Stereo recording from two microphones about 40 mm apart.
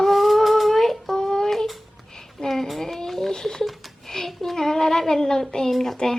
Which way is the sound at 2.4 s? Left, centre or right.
Centre.